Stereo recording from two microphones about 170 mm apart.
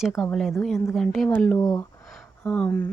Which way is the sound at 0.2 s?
Centre (ahead or behind).